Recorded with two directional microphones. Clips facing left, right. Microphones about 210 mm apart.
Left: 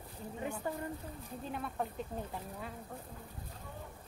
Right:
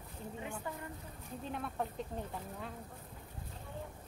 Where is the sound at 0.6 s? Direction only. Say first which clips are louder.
Left 7 dB; 40° left (ahead or behind).